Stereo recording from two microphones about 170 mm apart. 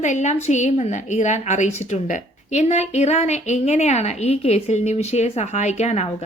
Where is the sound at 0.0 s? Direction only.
45° left (ahead or behind).